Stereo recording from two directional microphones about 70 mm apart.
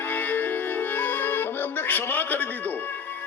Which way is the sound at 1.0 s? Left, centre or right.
Left.